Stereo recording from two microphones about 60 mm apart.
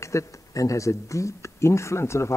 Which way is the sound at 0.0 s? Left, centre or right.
Left.